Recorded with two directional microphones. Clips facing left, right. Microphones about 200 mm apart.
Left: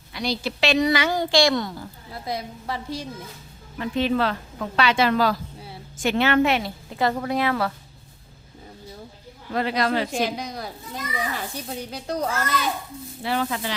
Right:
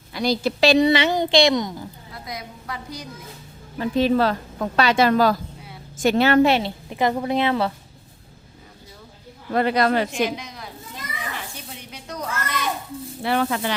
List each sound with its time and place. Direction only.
0.1 s a woman's voice: 45° right (ahead or behind); by 1.9 s 15° right (ahead or behind)
2.2 s a woman's voice: 30° left (ahead or behind)
3.8 s a woman's voice: 35° right (ahead or behind)
9.5 s speech: 55° right (ahead or behind)
10.1 s a woman's voice: 35° left (ahead or behind)
13.2 s speech: 60° right (ahead or behind)